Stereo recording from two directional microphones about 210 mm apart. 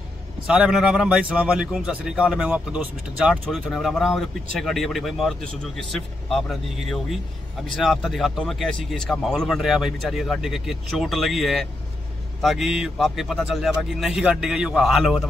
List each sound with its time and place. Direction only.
0.5 s a man's voice: 5° right (ahead or behind)